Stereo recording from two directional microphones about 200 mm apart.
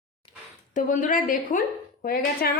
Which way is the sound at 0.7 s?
40° left (ahead or behind).